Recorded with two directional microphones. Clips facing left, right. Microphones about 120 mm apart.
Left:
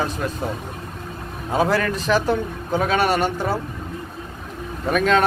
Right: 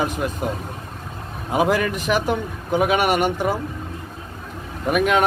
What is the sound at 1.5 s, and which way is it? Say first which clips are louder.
Speech: right 1 dB; 15° right (ahead or behind).